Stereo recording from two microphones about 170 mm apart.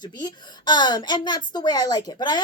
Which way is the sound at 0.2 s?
25° left (ahead or behind).